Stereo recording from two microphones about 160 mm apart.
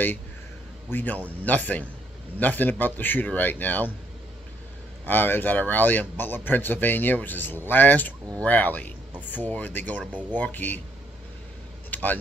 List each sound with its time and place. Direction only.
0.9 s a man's voice: 10° left (ahead or behind)
5.0 s a man's voice: 10° left (ahead or behind)
11.9 s vehicle: 10° left (ahead or behind)